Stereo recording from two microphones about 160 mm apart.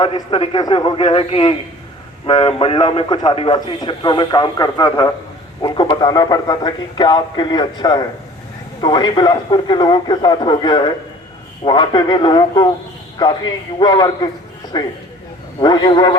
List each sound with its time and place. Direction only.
0.0 s a man's voice: 35° left (ahead or behind)